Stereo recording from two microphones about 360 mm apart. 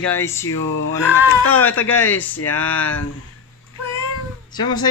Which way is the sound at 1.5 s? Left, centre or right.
Centre.